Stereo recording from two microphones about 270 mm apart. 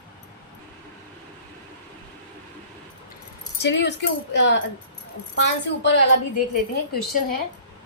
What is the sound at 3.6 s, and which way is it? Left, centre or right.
A woman's voice, left.